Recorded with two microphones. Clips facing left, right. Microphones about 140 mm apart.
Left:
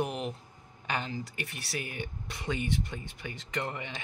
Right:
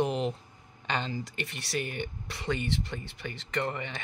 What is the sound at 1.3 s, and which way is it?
Speech, 80° right.